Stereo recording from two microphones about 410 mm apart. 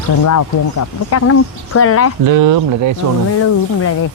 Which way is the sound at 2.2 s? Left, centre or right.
Right.